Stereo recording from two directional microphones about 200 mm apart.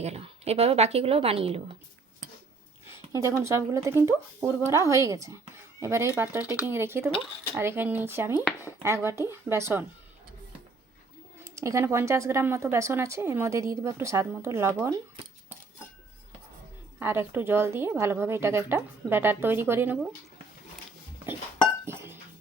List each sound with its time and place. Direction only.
0.0 s speech: 30° right (ahead or behind)
2.8 s a sound: 15° right (ahead or behind)
3.4 s a woman's voice: 15° right (ahead or behind)
11.4 s a woman's voice: 15° right (ahead or behind)
17.0 s a woman's voice: 10° right (ahead or behind)
21.8 s music: 10° right (ahead or behind)